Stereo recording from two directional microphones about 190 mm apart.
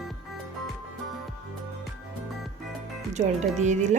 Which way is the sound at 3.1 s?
40° right (ahead or behind).